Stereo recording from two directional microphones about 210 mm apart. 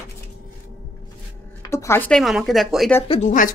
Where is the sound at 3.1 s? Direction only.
35° left (ahead or behind).